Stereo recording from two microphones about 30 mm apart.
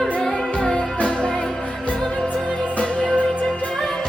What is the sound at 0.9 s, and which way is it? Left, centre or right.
Music, left.